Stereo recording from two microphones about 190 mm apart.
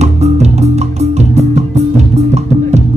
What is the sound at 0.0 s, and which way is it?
Music, 35° right (ahead or behind).